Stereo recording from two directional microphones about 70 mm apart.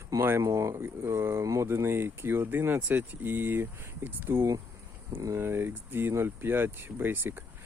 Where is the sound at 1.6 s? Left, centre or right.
Right.